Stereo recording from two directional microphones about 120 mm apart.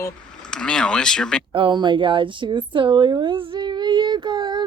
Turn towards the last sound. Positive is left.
turn(degrees=-40)  # may be behind; listen again after turning